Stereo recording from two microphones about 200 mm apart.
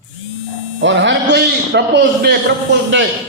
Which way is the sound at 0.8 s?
65° right (ahead or behind).